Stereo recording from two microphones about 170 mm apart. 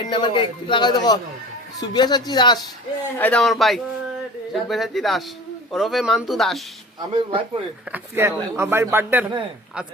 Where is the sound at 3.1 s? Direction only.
10° left (ahead or behind).